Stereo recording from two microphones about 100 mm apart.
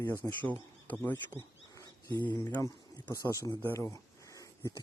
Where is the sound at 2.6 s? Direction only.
35° left (ahead or behind).